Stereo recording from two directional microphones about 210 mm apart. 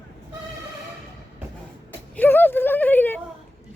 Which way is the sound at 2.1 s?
10° left (ahead or behind).